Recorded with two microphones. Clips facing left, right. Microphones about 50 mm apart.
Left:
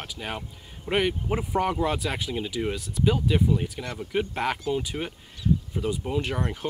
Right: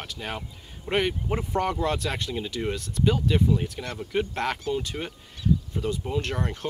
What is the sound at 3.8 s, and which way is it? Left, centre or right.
Speech, centre.